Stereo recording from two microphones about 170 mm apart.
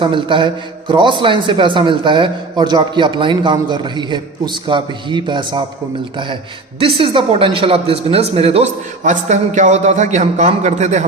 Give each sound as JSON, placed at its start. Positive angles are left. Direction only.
{"t": 0.0, "sound": "a man's voice", "side_deg": -30}
{"t": 6.7, "sound": "speech", "side_deg": -30}